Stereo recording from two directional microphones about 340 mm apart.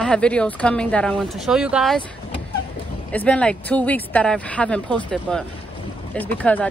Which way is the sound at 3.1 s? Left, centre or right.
Centre.